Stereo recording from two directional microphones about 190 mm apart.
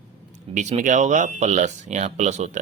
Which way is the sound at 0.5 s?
40° right (ahead or behind).